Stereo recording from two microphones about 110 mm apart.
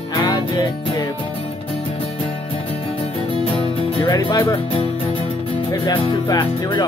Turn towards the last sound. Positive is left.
turn(degrees=35)  # may be behind; listen again after turning